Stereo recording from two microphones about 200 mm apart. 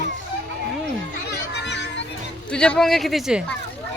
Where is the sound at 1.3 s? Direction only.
60° left (ahead or behind).